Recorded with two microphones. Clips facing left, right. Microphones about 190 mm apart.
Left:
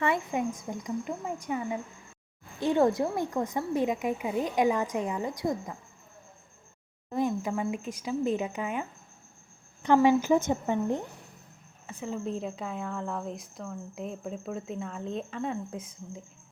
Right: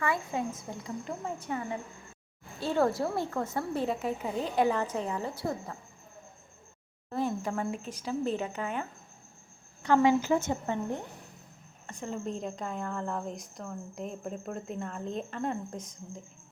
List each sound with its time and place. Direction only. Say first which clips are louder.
0.0 s a woman's voice: left 3 dB; 20° left (ahead or behind)
0.9 s a woman's voice: left 3 dB; 10° left (ahead or behind)
7.1 s a woman's voice: left 3 dB; 15° left (ahead or behind)
11.9 s a woman's voice: left 2 dB; 5° left (ahead or behind)